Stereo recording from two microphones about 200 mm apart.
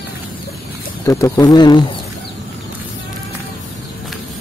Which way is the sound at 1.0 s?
15° left (ahead or behind).